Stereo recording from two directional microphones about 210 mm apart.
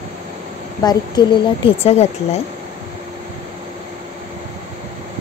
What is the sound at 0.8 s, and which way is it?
A woman's voice, 20° left (ahead or behind).